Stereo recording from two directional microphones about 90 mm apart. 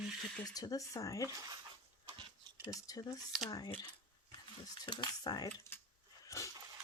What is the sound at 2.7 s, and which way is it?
Speech, 45° left (ahead or behind).